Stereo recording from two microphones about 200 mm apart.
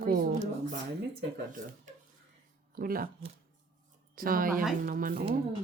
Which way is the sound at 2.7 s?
45° right (ahead or behind).